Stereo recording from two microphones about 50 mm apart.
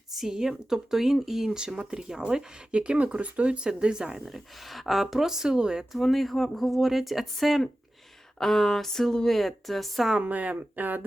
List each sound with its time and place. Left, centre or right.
0.1 s speech: centre
6.0 s speech: centre
10.2 s speech: right